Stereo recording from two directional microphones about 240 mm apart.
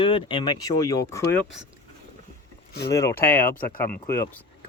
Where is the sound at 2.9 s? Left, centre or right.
Centre.